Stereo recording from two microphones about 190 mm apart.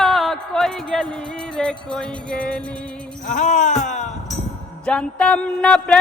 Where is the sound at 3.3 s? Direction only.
40° left (ahead or behind).